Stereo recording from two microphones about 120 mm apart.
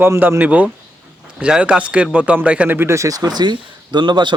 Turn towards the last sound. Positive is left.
turn(degrees=-40)  # may be behind; listen again after turning